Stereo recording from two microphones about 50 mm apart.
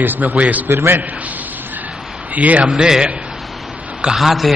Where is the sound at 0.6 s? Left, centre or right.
Right.